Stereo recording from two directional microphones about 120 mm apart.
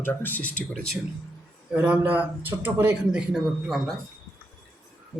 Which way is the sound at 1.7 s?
10° right (ahead or behind).